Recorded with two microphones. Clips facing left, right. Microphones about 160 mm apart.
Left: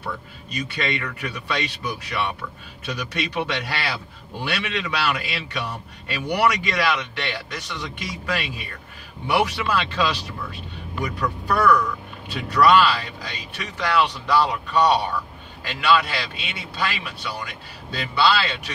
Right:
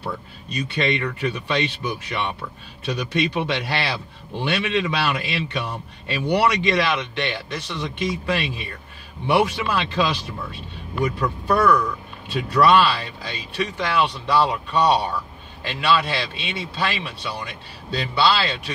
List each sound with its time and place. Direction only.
0.7 s a man's voice: 25° right (ahead or behind)